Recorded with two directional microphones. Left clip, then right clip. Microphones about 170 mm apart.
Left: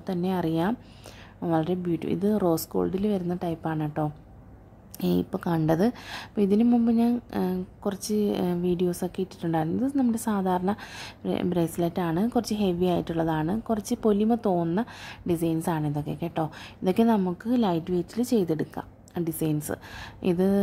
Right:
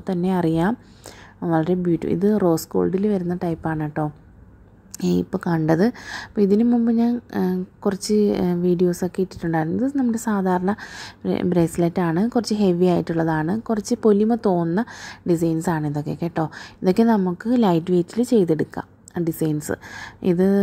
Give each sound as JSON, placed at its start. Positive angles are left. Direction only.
{"t": 0.0, "sound": "a woman's voice", "side_deg": -20}